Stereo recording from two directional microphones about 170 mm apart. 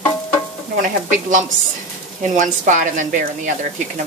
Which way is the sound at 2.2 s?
50° right (ahead or behind).